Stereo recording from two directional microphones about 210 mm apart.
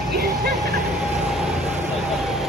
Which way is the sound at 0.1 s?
50° right (ahead or behind).